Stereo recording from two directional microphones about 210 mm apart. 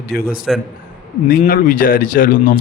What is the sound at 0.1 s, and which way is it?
A man's voice, 45° left (ahead or behind).